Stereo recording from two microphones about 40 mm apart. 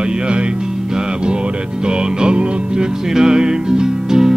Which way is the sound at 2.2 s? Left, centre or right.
Right.